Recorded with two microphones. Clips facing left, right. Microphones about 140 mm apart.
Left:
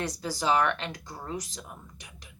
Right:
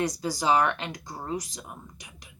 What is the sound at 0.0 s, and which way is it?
Speech, 15° right (ahead or behind).